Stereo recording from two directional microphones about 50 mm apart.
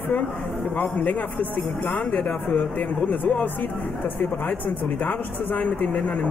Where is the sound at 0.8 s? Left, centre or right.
Left.